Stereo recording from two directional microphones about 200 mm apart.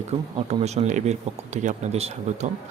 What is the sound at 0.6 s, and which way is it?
Speech, 35° right (ahead or behind).